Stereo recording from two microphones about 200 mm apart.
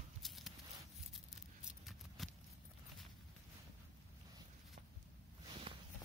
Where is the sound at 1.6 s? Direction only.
Centre (ahead or behind).